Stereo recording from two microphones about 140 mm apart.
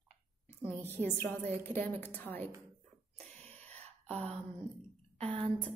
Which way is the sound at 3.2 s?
50° right (ahead or behind).